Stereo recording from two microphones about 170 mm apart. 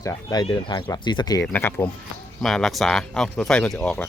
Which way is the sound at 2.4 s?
Centre (ahead or behind).